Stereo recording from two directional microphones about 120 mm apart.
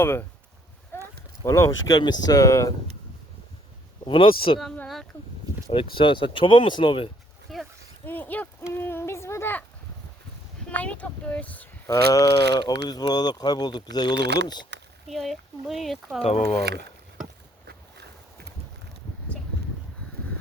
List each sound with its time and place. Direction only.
0.0 s speech: 20° left (ahead or behind)
0.9 s a sound: 20° left (ahead or behind)
1.5 s speech: 25° left (ahead or behind)
2.0 s speech: 35° left (ahead or behind)
4.0 s speech: 45° left (ahead or behind)
5.1 s speech: 15° left (ahead or behind)
5.7 s speech: 45° left (ahead or behind)
7.5 s a sound: centre (ahead or behind)
8.0 s speech: 15° left (ahead or behind)
8.7 s a sound: 20° left (ahead or behind)
10.7 s speech: 10° left (ahead or behind)
11.9 s speech: 30° left (ahead or behind)
15.0 s speech: centre (ahead or behind)